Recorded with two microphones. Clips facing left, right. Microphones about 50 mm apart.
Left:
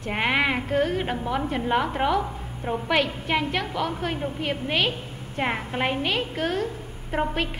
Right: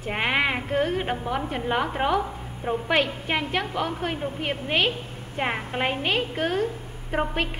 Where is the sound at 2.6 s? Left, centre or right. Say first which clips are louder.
Right 1 dB; centre.